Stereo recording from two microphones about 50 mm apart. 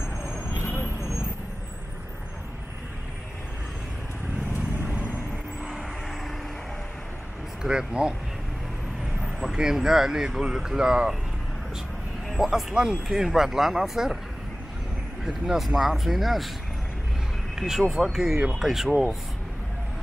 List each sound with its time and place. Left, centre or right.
0.0 s vehicle: left
7.6 s speech: centre
9.4 s speech: centre
12.3 s speech: centre
15.4 s speech: centre
17.6 s speech: centre